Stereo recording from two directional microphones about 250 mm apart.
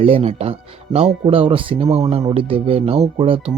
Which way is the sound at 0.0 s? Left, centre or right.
Right.